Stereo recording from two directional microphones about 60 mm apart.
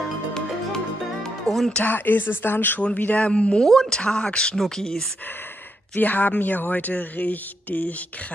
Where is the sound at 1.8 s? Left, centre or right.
Left; by 5.1 s centre.